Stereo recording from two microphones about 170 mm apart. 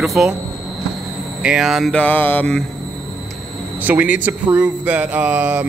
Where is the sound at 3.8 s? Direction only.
10° right (ahead or behind).